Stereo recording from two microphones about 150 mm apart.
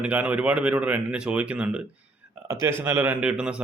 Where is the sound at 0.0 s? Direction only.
10° right (ahead or behind).